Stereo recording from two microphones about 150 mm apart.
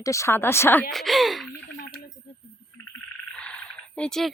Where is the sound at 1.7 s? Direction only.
70° left (ahead or behind).